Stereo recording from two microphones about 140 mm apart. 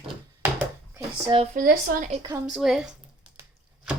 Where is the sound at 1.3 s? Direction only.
45° right (ahead or behind).